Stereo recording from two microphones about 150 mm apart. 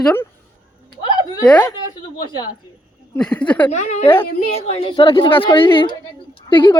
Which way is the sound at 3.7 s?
50° left (ahead or behind).